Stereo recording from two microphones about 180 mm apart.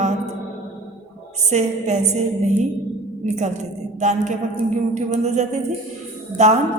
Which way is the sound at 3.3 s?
40° right (ahead or behind).